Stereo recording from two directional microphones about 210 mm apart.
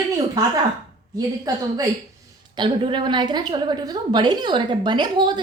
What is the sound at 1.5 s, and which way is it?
A woman's voice, 15° right (ahead or behind).